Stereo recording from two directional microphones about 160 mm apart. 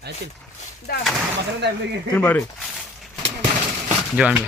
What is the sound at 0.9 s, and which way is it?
Speech, 70° left (ahead or behind).